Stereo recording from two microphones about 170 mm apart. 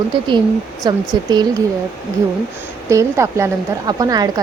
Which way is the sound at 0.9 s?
25° right (ahead or behind).